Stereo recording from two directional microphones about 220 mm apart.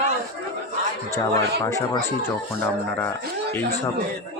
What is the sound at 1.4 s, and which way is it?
A man's voice, 15° left (ahead or behind).